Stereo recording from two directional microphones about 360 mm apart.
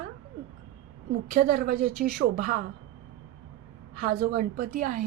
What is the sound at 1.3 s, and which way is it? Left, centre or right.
A woman's voice, right.